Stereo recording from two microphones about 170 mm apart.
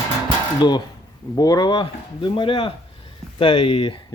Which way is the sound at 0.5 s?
25° left (ahead or behind).